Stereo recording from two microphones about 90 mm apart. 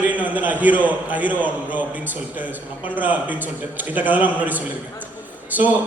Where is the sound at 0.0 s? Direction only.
20° right (ahead or behind).